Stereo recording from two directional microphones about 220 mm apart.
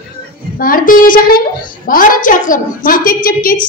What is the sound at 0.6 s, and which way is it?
A woman's voice, 40° left (ahead or behind).